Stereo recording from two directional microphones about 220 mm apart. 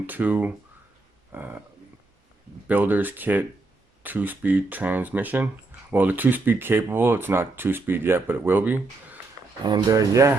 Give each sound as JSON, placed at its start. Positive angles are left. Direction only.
{"t": 0.0, "sound": "speech", "side_deg": -10}
{"t": 1.3, "sound": "a sound", "side_deg": -10}
{"t": 2.6, "sound": "speech", "side_deg": -10}